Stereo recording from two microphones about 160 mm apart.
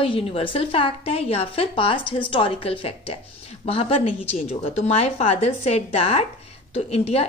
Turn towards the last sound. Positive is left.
turn(degrees=40)  # may be behind; listen again after turning